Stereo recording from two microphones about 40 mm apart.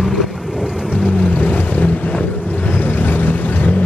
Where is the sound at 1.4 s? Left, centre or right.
Left.